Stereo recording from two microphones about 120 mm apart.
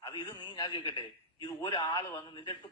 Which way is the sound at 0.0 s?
35° left (ahead or behind).